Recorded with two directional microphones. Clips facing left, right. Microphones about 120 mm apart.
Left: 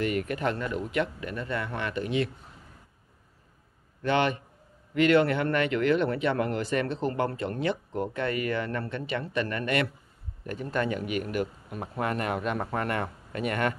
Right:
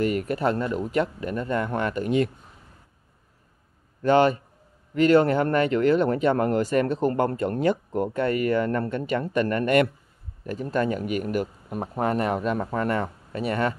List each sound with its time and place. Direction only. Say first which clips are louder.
0.0 s a man's voice: right 4 dB; 40° right (ahead or behind)
4.0 s a man's voice: right 7 dB; 40° right (ahead or behind)